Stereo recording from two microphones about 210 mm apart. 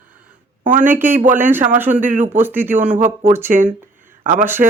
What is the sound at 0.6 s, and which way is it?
Speech, 35° right (ahead or behind).